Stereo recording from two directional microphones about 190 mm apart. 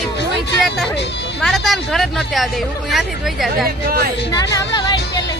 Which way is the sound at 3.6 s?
50° right (ahead or behind).